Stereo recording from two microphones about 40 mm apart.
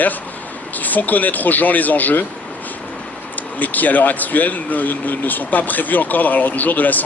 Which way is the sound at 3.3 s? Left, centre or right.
Left.